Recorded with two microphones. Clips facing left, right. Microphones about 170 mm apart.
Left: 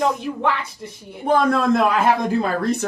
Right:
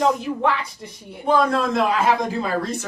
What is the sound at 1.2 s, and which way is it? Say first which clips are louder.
Speech: left 2 dB; 55° left (ahead or behind).